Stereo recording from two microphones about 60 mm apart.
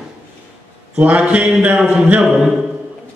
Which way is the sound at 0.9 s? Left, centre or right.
Right.